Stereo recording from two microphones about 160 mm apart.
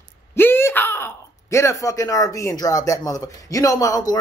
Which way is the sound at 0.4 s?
15° left (ahead or behind).